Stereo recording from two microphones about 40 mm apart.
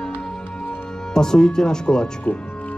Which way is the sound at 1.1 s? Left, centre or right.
Centre.